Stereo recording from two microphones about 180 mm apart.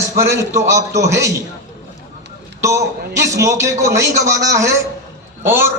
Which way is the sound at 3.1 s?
15° right (ahead or behind).